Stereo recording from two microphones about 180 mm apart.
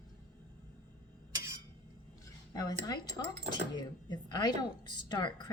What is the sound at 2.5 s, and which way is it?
A woman's voice, 20° left (ahead or behind).